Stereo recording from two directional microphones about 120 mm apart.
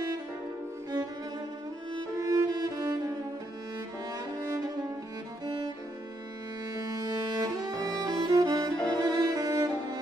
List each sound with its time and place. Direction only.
2.0 s music: 30° right (ahead or behind)
5.4 s music: 35° right (ahead or behind)
7.1 s music: 35° right (ahead or behind)